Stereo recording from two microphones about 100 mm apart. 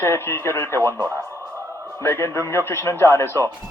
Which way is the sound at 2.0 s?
25° left (ahead or behind).